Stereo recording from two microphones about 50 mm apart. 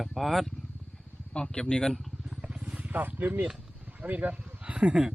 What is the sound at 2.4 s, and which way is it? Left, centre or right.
Wild animals, right.